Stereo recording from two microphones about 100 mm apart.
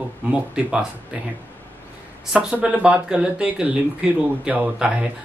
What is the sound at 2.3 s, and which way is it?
Speech, 15° right (ahead or behind).